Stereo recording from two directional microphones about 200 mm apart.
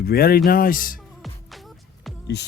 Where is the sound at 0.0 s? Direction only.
50° left (ahead or behind).